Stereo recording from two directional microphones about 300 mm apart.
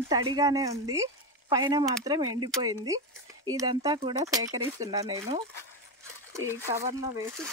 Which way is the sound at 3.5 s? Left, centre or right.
Centre.